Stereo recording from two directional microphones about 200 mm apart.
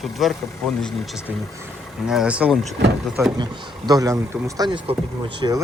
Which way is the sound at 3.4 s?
20° right (ahead or behind).